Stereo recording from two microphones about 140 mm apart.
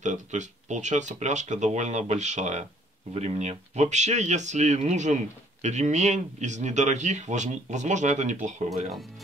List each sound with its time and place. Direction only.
0.0 s speech: 60° right (ahead or behind)